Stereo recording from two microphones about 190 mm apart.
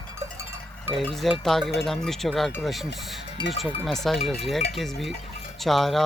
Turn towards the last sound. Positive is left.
turn(degrees=0)  # may be behind; listen again after turning